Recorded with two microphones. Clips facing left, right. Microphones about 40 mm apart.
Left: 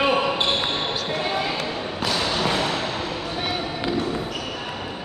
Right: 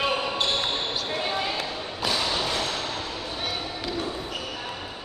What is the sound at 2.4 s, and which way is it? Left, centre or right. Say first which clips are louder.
Music: left 5 dB; left.